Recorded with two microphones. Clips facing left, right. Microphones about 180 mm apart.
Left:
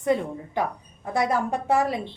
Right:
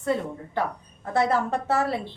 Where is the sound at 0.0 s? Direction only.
15° left (ahead or behind).